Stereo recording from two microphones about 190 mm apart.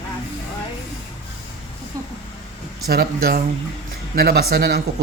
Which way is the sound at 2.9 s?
55° right (ahead or behind).